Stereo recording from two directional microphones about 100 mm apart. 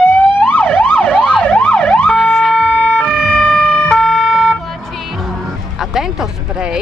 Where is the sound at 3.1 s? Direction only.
5° left (ahead or behind).